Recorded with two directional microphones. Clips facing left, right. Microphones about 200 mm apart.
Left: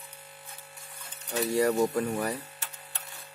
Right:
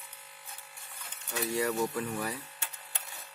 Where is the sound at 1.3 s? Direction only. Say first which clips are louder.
Left 6 dB; 35° left (ahead or behind).